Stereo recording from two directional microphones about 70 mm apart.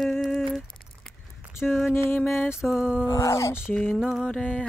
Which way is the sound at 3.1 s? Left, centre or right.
Left.